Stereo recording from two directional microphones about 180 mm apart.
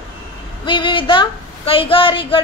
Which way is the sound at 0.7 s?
25° left (ahead or behind).